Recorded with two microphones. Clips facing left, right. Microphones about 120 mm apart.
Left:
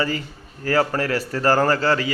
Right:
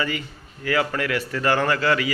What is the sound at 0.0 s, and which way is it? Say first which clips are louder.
A man's voice: left 3 dB; 35° left (ahead or behind).